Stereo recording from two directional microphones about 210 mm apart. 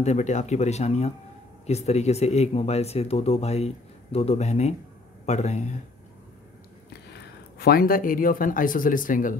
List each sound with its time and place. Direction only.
0.0 s speech: 35° left (ahead or behind)
7.5 s speech: 50° left (ahead or behind)